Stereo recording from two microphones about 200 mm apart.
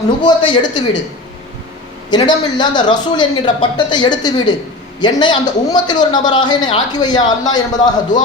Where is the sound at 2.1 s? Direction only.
20° left (ahead or behind).